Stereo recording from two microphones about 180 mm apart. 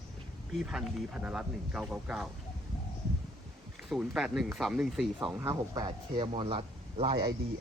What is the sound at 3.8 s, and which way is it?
Speech, 5° right (ahead or behind).